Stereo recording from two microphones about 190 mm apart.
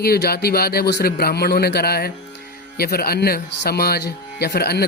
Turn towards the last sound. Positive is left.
turn(degrees=55)  # may be behind; listen again after turning